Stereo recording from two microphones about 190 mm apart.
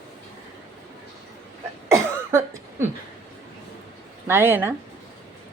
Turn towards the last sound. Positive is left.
turn(degrees=-10)  # may be behind; listen again after turning